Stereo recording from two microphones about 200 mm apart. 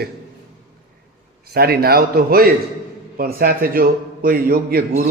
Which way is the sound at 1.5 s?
50° right (ahead or behind).